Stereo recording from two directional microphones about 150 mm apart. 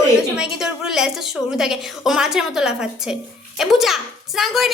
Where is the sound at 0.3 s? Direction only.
5° right (ahead or behind).